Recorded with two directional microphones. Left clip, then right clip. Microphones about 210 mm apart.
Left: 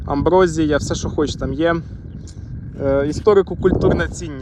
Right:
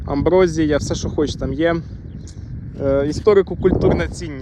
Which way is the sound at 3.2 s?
10° right (ahead or behind).